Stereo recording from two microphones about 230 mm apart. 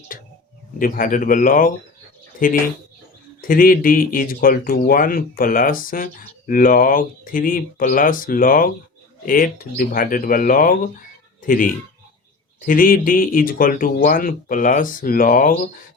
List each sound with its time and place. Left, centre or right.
0.1 s speech: left